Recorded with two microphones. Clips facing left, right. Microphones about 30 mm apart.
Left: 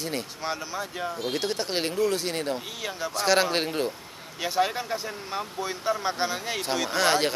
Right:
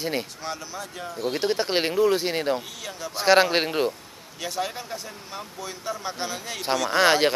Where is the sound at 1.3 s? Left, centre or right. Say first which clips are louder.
Right 7 dB; centre.